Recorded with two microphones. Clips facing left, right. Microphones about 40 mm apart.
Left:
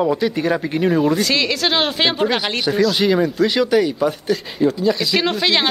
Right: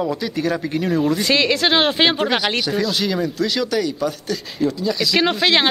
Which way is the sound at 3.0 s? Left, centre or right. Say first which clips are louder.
Left 5 dB; centre.